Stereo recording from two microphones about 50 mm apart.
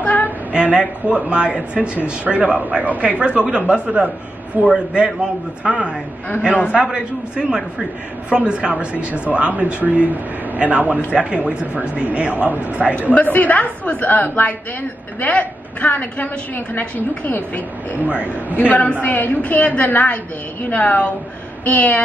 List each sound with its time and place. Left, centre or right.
0.0 s a sound: left
0.5 s a man's voice: right
13.1 s a woman's voice: left
18.0 s speech: right
18.6 s a woman's voice: left